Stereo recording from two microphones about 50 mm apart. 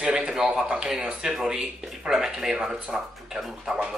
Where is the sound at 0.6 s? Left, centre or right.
Centre.